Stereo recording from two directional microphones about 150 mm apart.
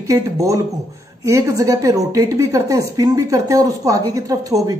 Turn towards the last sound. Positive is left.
turn(degrees=-25)  # may be behind; listen again after turning